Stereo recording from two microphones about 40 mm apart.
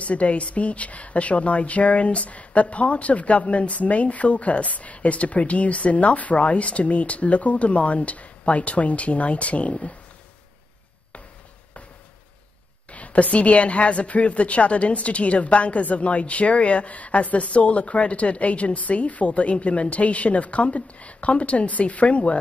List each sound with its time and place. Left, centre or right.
0.0 s a woman's voice: left
12.9 s a woman's voice: left